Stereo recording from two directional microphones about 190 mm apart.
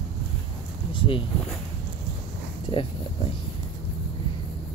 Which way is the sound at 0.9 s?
25° left (ahead or behind).